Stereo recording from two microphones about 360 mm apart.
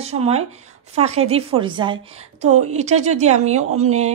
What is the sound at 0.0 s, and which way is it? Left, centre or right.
A woman's voice, centre.